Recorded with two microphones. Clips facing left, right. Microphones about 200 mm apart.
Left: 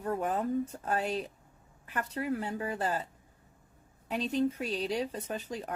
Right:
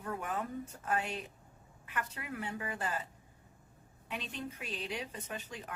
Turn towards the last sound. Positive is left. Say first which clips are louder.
# left 7 dB
turn(degrees=40)  # may be behind; listen again after turning